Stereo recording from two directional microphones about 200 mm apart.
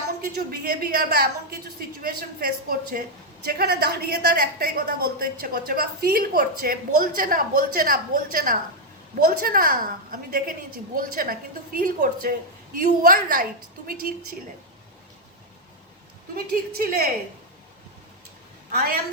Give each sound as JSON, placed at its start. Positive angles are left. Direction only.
{"t": 0.3, "sound": "a woman's voice", "side_deg": -50}
{"t": 16.3, "sound": "a woman's voice", "side_deg": -50}